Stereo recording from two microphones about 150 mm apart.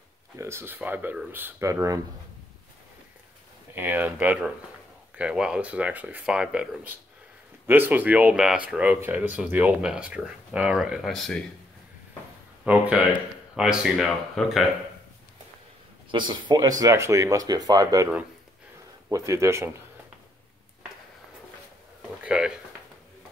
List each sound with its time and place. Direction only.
0.4 s speech: 15° right (ahead or behind)
3.7 s speech: 10° right (ahead or behind)
12.6 s speech: 10° right (ahead or behind)
16.1 s speech: 30° right (ahead or behind)
19.0 s speech: 20° right (ahead or behind)
22.2 s a sound: 5° right (ahead or behind)